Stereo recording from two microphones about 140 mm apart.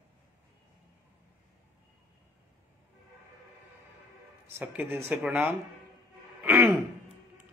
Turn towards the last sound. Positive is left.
turn(degrees=-20)  # may be behind; listen again after turning